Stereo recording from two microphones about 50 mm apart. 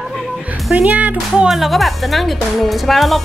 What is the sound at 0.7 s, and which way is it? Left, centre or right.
Speech, right.